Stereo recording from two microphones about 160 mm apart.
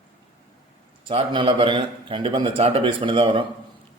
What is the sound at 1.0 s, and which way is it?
Speech, 30° right (ahead or behind).